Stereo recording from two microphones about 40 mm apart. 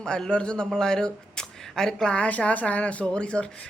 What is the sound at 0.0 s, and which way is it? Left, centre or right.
Speech, left.